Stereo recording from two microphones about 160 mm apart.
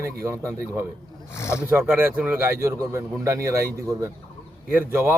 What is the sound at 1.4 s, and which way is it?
Speech, 15° left (ahead or behind).